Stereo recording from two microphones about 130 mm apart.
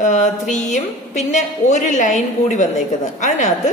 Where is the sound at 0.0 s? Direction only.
65° left (ahead or behind).